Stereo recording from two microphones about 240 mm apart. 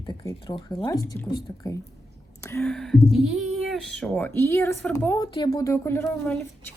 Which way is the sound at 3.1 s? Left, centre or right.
Centre.